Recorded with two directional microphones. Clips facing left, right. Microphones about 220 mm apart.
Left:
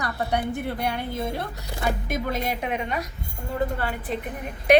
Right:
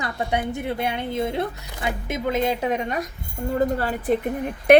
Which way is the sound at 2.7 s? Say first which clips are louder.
Right 3 dB; 45° right (ahead or behind).